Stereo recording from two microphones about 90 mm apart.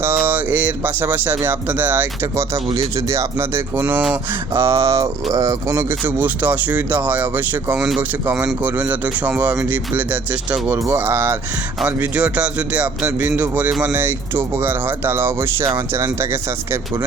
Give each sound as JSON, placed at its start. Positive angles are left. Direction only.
{"t": 0.0, "sound": "speech", "side_deg": -25}
{"t": 2.7, "sound": "speech", "side_deg": -35}
{"t": 6.0, "sound": "speech", "side_deg": -20}
{"t": 7.8, "sound": "speech", "side_deg": -5}
{"t": 8.6, "sound": "speech", "side_deg": -20}